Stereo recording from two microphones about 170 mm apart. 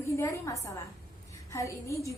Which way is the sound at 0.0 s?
15° left (ahead or behind).